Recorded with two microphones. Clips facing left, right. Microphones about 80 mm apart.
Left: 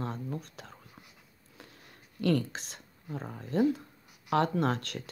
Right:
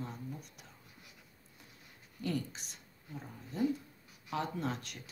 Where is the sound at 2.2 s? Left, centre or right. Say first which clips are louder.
Left 9 dB; left.